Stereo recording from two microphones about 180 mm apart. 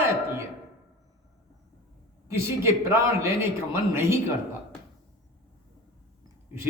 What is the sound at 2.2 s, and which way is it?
A man's voice, 15° right (ahead or behind).